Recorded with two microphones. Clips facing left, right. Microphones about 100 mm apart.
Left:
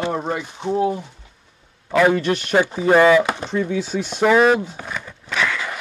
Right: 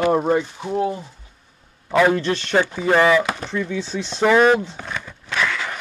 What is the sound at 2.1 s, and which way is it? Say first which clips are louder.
Speech: left 1 dB; 15° left (ahead or behind).